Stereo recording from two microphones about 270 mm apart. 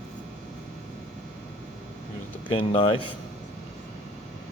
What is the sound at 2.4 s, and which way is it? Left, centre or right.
Speech, centre.